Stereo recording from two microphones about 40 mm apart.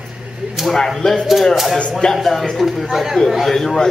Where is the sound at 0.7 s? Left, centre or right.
Centre.